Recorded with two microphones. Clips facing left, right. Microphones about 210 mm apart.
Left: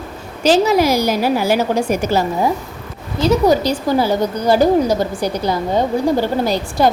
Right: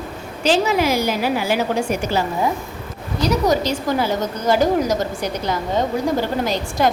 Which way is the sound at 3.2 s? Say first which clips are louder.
Left 5 dB; 30° left (ahead or behind).